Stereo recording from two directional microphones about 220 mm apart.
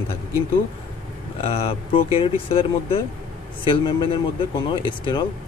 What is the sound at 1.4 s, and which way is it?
Speech, 25° left (ahead or behind).